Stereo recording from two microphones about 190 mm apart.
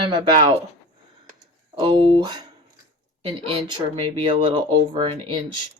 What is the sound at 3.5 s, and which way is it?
Speech, 25° right (ahead or behind).